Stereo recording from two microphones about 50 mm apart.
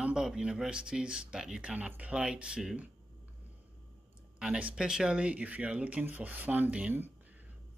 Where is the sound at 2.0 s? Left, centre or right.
Right.